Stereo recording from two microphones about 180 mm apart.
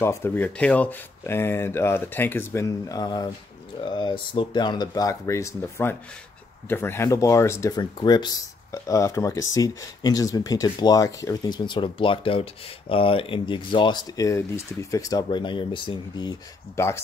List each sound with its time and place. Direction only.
0.0 s speech: 15° left (ahead or behind)